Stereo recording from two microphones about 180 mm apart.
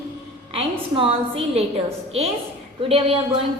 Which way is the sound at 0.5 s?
30° right (ahead or behind).